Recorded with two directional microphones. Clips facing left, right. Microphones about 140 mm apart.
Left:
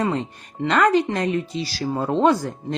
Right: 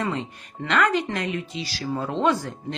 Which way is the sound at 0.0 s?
35° left (ahead or behind).